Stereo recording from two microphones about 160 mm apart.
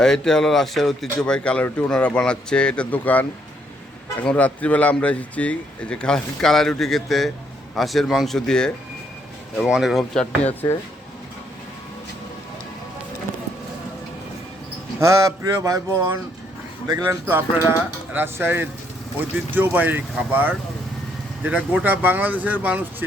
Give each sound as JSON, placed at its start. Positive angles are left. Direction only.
{"t": 0.0, "sound": "speech", "side_deg": 5}
{"t": 14.9, "sound": "speech", "side_deg": -20}